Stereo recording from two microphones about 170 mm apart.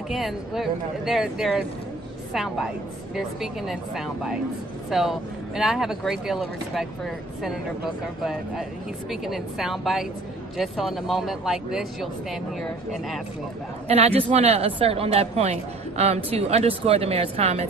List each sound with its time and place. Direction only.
0.1 s speech: centre (ahead or behind)
13.8 s a woman's voice: 35° right (ahead or behind)